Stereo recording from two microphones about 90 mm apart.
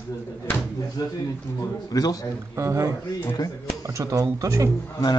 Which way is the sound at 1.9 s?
45° left (ahead or behind).